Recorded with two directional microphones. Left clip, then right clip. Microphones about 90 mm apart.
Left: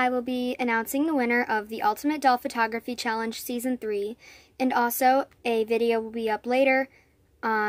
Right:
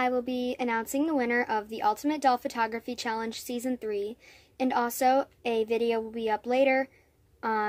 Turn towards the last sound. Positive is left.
turn(degrees=25)  # may be behind; listen again after turning